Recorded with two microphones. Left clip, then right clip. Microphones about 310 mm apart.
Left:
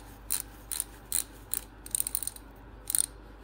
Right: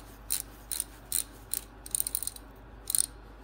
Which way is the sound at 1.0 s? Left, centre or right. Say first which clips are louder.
Even; centre.